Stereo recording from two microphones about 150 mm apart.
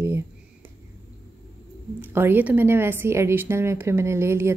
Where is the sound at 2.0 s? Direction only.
15° right (ahead or behind).